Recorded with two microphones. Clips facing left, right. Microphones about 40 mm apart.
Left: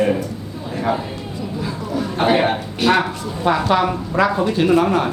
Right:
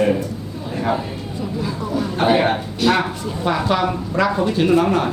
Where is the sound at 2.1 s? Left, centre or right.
Centre.